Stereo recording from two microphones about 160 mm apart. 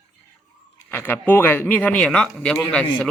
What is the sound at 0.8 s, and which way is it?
Speech, 10° left (ahead or behind).